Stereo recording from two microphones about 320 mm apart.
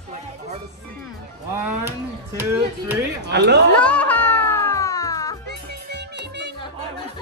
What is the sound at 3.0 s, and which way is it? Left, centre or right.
Speech, right.